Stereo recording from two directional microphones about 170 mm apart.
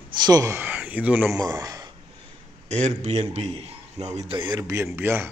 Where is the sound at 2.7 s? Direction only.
40° right (ahead or behind).